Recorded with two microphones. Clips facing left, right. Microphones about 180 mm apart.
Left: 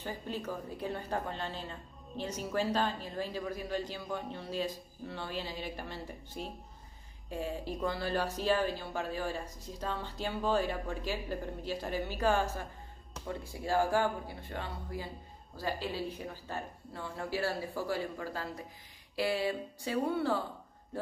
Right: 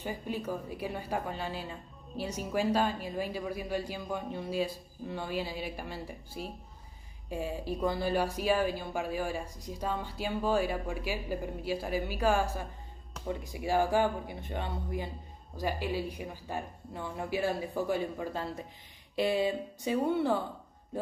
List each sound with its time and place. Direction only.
0.0 s a woman's voice: 10° right (ahead or behind)